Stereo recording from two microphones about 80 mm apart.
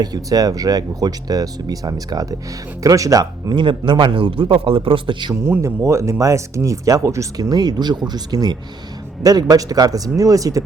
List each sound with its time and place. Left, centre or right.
0.0 s speech: right
3.5 s a man's voice: right
5.3 s speech: right